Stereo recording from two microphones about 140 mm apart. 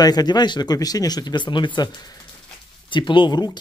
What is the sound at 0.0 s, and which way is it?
Speech, 30° left (ahead or behind).